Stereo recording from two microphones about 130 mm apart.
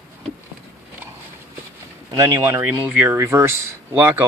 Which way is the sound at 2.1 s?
25° right (ahead or behind).